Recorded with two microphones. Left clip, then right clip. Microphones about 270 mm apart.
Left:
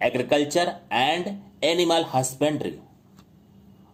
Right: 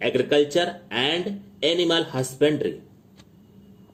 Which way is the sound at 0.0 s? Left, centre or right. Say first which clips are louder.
Right 2 dB; left.